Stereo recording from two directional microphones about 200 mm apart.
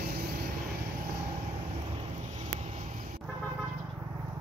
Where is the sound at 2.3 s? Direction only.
30° right (ahead or behind).